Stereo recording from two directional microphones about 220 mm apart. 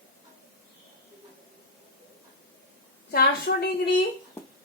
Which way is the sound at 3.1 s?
45° left (ahead or behind).